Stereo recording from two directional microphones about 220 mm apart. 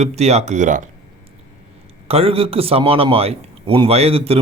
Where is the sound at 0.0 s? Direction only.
30° right (ahead or behind).